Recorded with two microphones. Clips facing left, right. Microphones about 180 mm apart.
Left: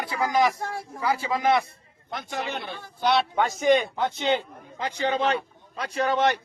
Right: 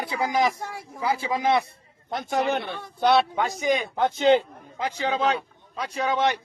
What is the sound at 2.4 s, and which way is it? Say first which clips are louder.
Speech: right 7 dB; 60° right (ahead or behind).